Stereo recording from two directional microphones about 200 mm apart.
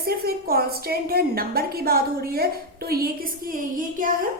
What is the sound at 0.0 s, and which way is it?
A woman's voice, 50° right (ahead or behind).